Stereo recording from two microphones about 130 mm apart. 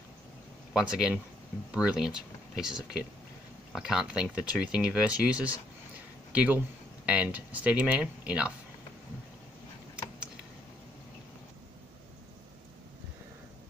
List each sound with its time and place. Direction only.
0.7 s speech: 5° right (ahead or behind)